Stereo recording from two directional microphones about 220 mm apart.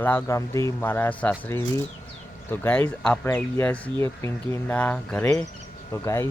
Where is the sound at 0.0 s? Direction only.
10° left (ahead or behind).